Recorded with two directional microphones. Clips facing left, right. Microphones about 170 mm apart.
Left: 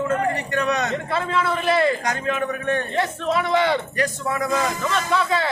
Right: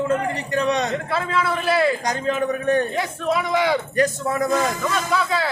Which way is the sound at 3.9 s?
45° right (ahead or behind).